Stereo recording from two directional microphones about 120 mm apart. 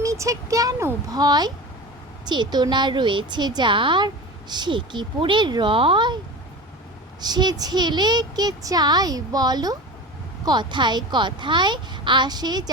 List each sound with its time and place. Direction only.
0.0 s a woman's voice: 25° right (ahead or behind); by 6.1 s 45° right (ahead or behind)
7.2 s a woman's voice: 35° right (ahead or behind)